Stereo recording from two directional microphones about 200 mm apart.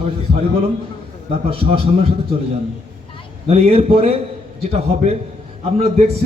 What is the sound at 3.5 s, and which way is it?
A man's voice, 30° right (ahead or behind).